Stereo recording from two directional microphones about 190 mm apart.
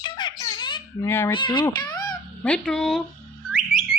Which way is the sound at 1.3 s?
25° left (ahead or behind).